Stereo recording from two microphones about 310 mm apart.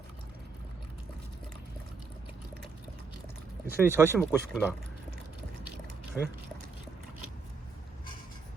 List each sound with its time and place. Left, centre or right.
3.8 s speech: centre
6.2 s speech: centre